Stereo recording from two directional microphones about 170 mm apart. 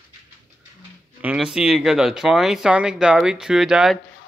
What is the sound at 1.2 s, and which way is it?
Speech, 5° right (ahead or behind).